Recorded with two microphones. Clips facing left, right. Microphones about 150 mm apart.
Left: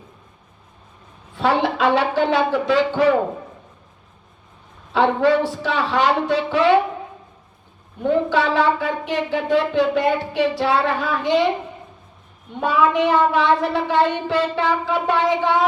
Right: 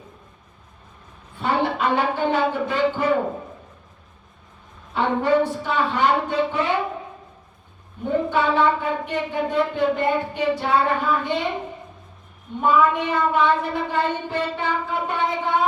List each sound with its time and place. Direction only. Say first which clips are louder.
1.4 s a man's voice: left 4 dB; 85° left
4.9 s speech: left 3 dB; 90° left
8.0 s speech: left 3 dB; 80° left
12.5 s speech: left 1 dB; 80° left